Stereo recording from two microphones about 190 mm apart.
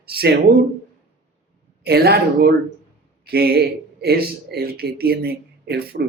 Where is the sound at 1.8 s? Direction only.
55° right (ahead or behind).